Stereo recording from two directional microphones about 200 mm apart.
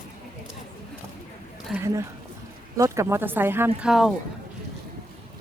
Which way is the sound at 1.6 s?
5° right (ahead or behind).